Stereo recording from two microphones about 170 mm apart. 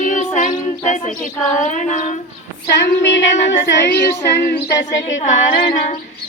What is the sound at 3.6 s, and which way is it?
Speech, 65° left (ahead or behind).